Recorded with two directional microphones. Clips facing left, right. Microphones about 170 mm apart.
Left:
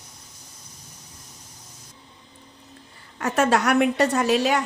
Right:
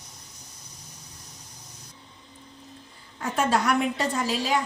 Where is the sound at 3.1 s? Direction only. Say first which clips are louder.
Left 4 dB; 75° left (ahead or behind).